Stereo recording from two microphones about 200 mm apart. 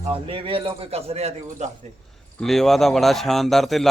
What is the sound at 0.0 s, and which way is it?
A man's voice, 25° right (ahead or behind).